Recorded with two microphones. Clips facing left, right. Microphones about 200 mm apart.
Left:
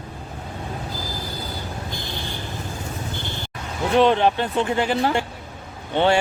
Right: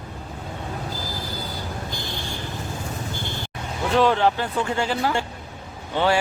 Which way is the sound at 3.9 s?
20° left (ahead or behind).